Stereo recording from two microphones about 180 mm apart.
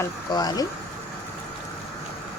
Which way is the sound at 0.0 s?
20° left (ahead or behind).